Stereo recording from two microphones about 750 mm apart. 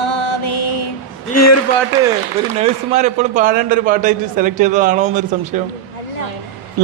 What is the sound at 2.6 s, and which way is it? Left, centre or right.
A man's voice, centre.